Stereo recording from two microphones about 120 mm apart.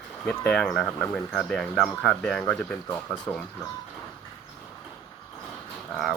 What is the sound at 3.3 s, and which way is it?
Speech, 20° left (ahead or behind).